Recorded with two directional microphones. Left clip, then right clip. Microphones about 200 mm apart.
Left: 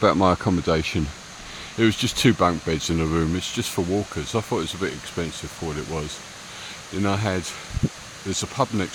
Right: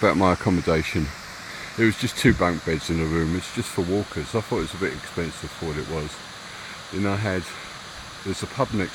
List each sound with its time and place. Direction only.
0.0 s speech: 5° left (ahead or behind)
8.3 s speech: 10° left (ahead or behind)